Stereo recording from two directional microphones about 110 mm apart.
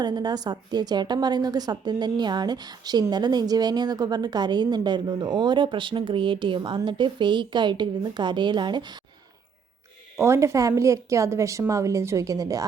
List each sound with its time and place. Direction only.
0.0 s a woman's voice: 40° right (ahead or behind)
10.2 s a woman's voice: 25° right (ahead or behind)